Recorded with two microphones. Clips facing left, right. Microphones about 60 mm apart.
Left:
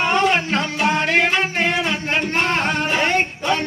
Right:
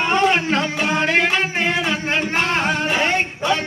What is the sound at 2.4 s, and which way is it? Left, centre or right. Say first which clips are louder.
Singing: even; centre.